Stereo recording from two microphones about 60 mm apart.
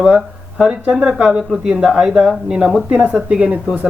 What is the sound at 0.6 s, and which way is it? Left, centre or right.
Speech, centre.